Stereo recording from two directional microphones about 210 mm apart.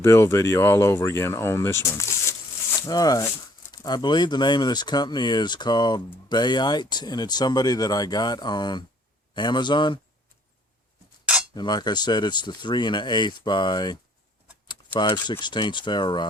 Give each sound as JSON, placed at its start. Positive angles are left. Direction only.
{"t": 0.0, "sound": "speech", "side_deg": 10}
{"t": 11.5, "sound": "speech", "side_deg": 20}